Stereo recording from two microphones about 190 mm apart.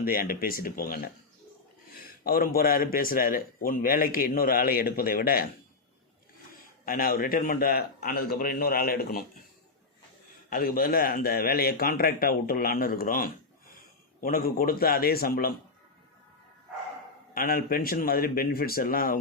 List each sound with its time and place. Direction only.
0.0 s a man's voice: 50° left (ahead or behind)
2.2 s a man's voice: 50° left (ahead or behind)
6.8 s a man's voice: 50° left (ahead or behind)
10.5 s a man's voice: 50° left (ahead or behind)
17.3 s a man's voice: 50° left (ahead or behind)